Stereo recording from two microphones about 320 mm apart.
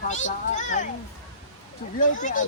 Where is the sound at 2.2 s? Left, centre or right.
Left.